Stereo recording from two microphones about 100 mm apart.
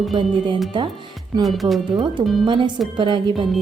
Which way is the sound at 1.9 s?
50° right (ahead or behind).